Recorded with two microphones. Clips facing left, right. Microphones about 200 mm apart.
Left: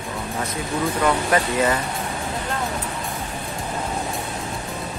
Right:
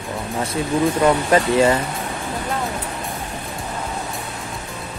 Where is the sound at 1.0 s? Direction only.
25° right (ahead or behind).